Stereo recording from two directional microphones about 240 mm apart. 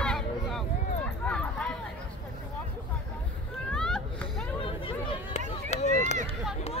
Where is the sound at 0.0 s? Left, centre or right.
Centre.